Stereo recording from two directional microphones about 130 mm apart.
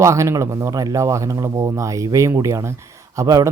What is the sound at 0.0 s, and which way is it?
Speech, 25° right (ahead or behind).